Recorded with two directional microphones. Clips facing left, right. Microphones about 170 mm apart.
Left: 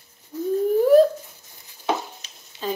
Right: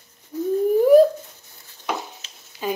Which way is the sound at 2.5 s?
25° left (ahead or behind).